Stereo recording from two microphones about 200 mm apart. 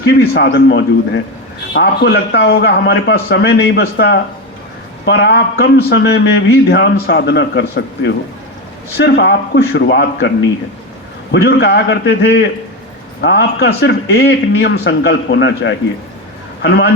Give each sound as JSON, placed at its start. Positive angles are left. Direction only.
{"t": 0.2, "sound": "a man's voice", "side_deg": 55}